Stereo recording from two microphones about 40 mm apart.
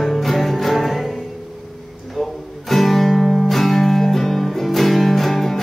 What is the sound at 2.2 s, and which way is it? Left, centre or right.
Guitar, centre.